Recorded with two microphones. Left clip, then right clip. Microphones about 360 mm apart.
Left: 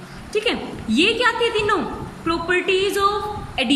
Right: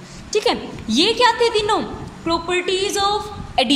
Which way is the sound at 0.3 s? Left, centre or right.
Centre.